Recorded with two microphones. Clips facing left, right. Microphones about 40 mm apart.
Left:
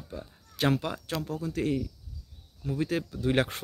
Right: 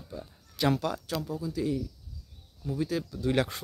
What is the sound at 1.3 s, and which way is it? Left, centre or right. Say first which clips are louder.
Speech: left 2 dB; left.